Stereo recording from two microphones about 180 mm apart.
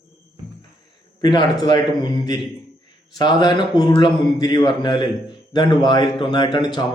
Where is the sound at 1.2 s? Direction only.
25° left (ahead or behind).